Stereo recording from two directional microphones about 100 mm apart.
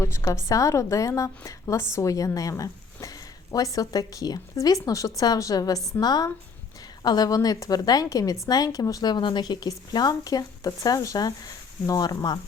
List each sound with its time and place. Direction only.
0.0 s a woman's voice: 25° left (ahead or behind); by 12.4 s 45° left (ahead or behind)